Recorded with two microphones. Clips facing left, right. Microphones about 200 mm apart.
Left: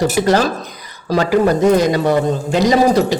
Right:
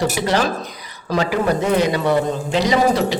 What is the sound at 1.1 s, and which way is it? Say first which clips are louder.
A man's voice: left 5 dB; 40° left (ahead or behind).